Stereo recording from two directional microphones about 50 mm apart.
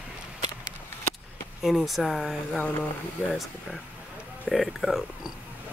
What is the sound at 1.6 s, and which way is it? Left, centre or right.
Speech, centre.